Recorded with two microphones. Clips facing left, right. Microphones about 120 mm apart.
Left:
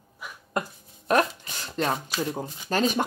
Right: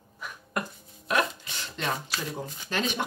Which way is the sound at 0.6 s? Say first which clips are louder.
Left 3 dB; 25° left (ahead or behind).